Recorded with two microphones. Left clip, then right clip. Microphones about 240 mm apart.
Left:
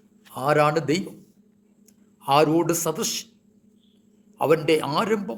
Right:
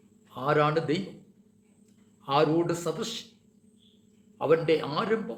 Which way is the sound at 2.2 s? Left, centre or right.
Left.